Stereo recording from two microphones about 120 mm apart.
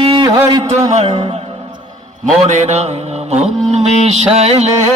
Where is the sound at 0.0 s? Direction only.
40° right (ahead or behind).